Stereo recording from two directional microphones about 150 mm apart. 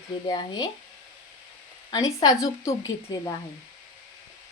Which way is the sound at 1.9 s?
25° left (ahead or behind).